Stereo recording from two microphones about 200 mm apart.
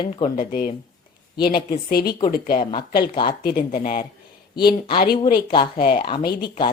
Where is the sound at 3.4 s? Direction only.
45° left (ahead or behind).